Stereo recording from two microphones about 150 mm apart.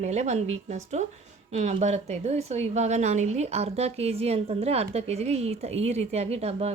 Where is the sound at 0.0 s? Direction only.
50° right (ahead or behind).